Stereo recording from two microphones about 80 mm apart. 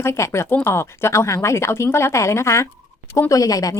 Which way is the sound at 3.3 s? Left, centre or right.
Left.